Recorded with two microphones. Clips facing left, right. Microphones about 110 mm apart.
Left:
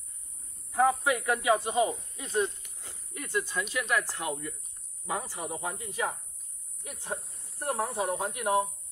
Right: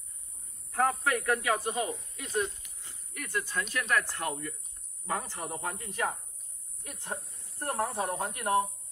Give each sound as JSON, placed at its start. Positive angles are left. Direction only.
{"t": 0.7, "sound": "a man's voice", "side_deg": 15}
{"t": 2.6, "sound": "a sound", "side_deg": 0}
{"t": 3.2, "sound": "a man's voice", "side_deg": 20}